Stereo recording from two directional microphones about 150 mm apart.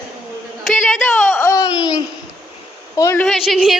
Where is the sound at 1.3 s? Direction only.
20° left (ahead or behind).